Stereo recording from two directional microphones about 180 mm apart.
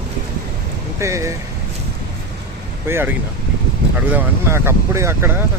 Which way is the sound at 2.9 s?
15° right (ahead or behind).